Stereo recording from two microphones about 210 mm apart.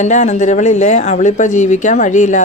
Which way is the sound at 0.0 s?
35° left (ahead or behind).